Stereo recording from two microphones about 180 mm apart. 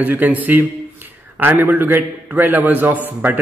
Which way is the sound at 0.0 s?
10° right (ahead or behind).